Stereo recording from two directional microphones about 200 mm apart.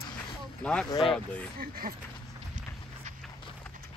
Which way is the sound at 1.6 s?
45° right (ahead or behind).